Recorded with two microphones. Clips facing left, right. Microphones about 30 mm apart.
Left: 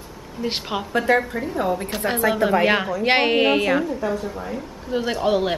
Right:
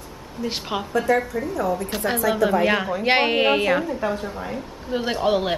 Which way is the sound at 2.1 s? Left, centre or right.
Left.